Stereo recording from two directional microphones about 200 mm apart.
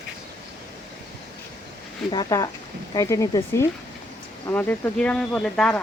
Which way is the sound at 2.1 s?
20° left (ahead or behind).